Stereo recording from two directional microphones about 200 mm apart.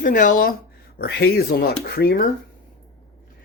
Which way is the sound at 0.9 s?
55° left (ahead or behind).